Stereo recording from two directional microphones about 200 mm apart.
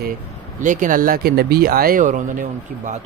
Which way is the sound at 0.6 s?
40° right (ahead or behind).